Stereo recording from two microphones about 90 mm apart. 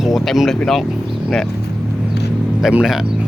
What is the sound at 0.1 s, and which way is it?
Speech, centre (ahead or behind).